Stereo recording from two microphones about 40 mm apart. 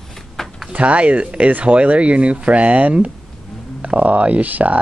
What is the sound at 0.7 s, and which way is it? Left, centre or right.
Speech, right.